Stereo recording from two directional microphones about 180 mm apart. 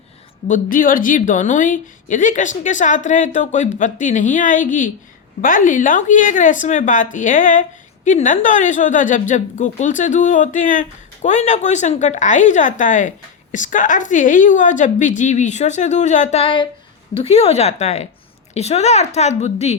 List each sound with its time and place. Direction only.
0.4 s a woman's voice: 50° left (ahead or behind)